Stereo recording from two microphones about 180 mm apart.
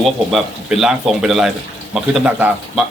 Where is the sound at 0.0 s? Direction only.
Centre (ahead or behind).